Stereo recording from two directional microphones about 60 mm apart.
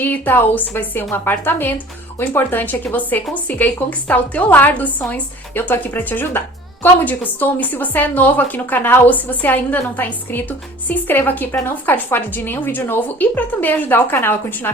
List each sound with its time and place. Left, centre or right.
0.0 s a woman's voice: left